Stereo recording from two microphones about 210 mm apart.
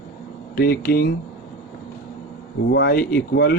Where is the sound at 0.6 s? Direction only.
45° left (ahead or behind).